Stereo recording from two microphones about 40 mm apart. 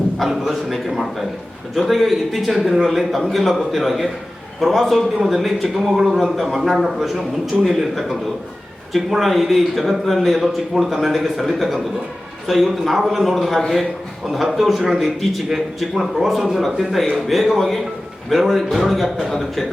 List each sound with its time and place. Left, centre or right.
0.3 s a man's voice: centre